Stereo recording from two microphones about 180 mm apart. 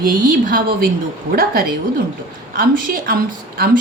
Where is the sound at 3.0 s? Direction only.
55° right (ahead or behind).